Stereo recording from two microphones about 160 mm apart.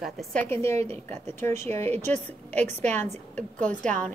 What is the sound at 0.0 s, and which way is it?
Speech, 5° left (ahead or behind).